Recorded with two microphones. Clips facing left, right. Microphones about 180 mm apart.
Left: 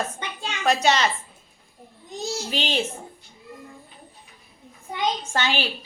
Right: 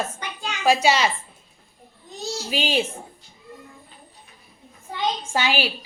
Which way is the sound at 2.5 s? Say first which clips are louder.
Right 4 dB; 10° right (ahead or behind).